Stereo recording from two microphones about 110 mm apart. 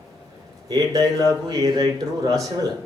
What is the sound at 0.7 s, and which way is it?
Speech, 30° right (ahead or behind).